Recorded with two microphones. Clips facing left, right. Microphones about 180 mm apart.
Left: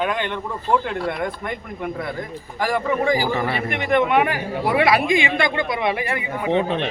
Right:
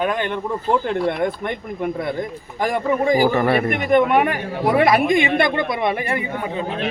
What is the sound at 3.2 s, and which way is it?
A woman's voice, 55° right (ahead or behind).